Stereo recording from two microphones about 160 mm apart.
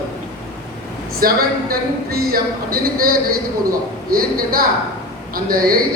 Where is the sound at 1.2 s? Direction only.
70° right (ahead or behind).